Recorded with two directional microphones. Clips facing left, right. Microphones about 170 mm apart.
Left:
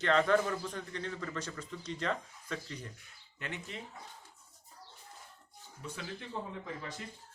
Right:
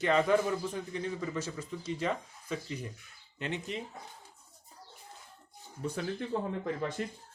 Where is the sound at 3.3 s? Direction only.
20° right (ahead or behind).